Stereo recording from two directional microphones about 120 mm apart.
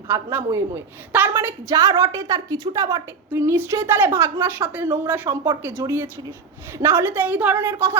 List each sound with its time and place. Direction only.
0.1 s a woman's voice: 20° right (ahead or behind)